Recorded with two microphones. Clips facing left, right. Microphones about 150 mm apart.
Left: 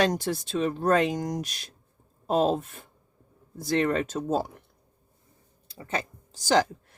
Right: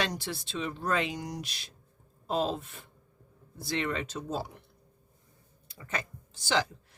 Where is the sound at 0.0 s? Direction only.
45° left (ahead or behind).